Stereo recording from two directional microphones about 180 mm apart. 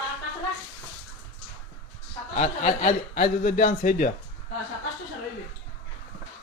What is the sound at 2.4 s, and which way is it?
Speech, 40° left (ahead or behind).